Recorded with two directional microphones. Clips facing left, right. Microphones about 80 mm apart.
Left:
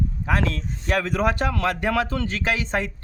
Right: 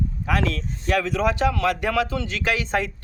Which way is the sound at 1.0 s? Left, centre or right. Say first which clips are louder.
Right 1 dB; left.